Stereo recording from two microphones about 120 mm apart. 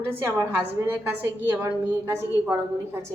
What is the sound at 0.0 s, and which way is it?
A woman's voice, 20° right (ahead or behind).